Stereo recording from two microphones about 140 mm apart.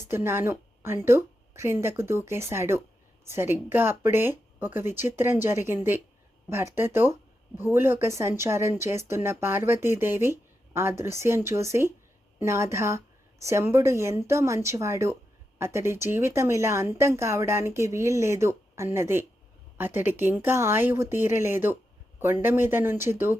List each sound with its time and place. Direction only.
0.0 s a woman's voice: 15° right (ahead or behind)